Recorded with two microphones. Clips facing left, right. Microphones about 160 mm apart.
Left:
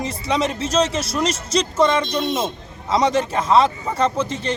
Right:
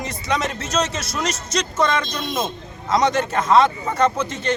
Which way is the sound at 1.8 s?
10° left (ahead or behind).